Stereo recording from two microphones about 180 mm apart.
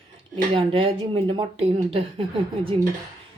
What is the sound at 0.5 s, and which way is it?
Speech, 30° right (ahead or behind).